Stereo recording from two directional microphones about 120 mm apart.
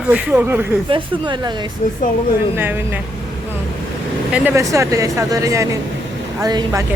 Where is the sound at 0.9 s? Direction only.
45° right (ahead or behind).